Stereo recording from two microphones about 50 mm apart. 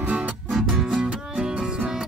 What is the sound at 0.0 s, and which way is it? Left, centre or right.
Music, right.